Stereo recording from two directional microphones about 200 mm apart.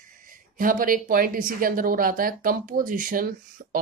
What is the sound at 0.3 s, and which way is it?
A woman's voice, 45° right (ahead or behind).